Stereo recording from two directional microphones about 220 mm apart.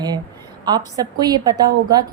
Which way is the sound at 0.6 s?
20° right (ahead or behind).